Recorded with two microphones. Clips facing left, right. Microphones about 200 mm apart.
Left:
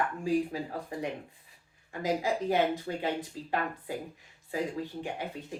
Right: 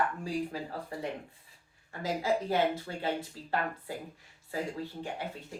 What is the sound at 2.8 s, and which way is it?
Speech, 15° left (ahead or behind).